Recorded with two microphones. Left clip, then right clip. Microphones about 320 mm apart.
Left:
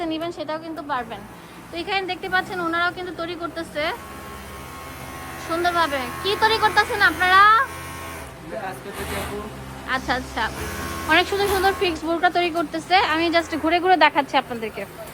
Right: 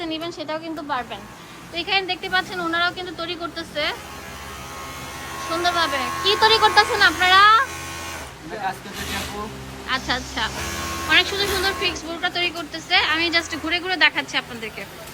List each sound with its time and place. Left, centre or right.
0.0 s speech: centre
5.5 s speech: centre
9.8 s speech: centre